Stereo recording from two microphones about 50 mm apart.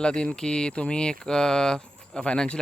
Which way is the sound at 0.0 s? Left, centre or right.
Centre.